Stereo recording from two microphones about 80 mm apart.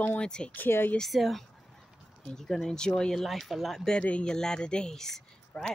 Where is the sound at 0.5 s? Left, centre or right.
Left.